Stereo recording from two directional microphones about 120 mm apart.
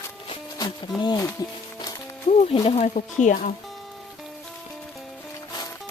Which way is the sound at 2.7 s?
70° left (ahead or behind).